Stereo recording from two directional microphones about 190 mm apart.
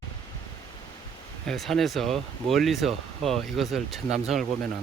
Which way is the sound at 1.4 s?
Centre (ahead or behind).